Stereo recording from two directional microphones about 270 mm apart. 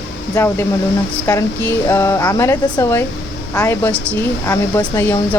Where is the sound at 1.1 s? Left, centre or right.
Centre.